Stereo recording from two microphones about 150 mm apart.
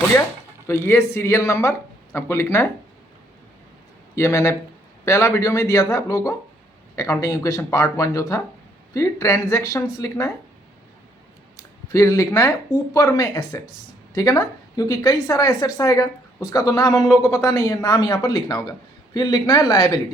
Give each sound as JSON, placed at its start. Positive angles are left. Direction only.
{"t": 0.7, "sound": "a woman's voice", "side_deg": 15}
{"t": 4.1, "sound": "a woman's voice", "side_deg": 20}
{"t": 11.5, "sound": "a woman's voice", "side_deg": 20}